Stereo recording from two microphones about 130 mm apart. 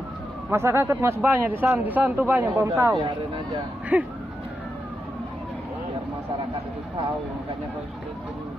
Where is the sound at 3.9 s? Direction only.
10° right (ahead or behind).